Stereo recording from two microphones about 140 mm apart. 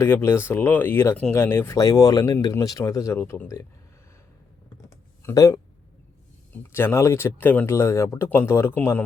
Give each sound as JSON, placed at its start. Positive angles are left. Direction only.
{"t": 0.0, "sound": "speech", "side_deg": 20}
{"t": 5.2, "sound": "speech", "side_deg": 20}